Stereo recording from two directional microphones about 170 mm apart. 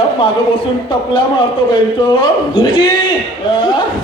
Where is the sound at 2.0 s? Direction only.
30° left (ahead or behind).